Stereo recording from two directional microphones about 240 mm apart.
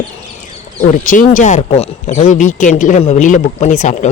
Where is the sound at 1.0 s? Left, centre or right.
Left.